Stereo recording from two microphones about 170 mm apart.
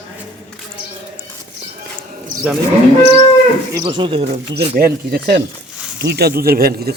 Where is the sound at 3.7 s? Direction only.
30° right (ahead or behind).